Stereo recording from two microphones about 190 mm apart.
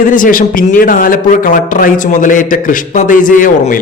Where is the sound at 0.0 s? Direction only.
45° left (ahead or behind).